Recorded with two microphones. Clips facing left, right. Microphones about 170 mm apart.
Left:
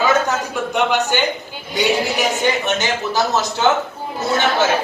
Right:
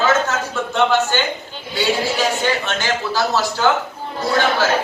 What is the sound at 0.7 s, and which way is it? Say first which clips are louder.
Speech: right 1 dB; 15° left (ahead or behind).